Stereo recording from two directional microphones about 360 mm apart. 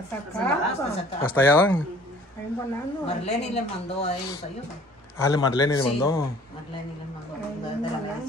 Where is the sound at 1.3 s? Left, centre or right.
Centre.